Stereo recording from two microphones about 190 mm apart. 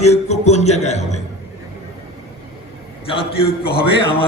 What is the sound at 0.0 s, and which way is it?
Music, 35° left (ahead or behind).